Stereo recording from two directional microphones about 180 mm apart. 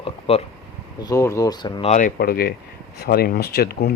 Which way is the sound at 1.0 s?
20° left (ahead or behind).